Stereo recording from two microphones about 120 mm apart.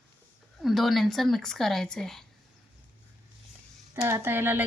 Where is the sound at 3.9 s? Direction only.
25° right (ahead or behind).